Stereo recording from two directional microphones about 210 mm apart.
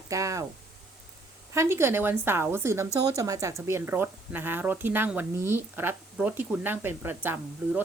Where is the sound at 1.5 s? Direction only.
10° right (ahead or behind).